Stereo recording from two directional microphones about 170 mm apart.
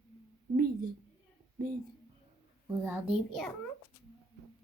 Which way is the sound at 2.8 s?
5° right (ahead or behind).